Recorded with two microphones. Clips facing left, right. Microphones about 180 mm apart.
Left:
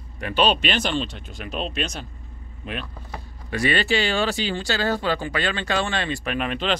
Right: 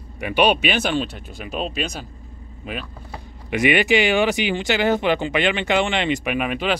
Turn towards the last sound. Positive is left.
turn(degrees=-10)  # may be behind; listen again after turning